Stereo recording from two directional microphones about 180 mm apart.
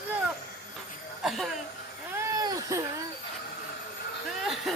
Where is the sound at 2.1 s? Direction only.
20° right (ahead or behind).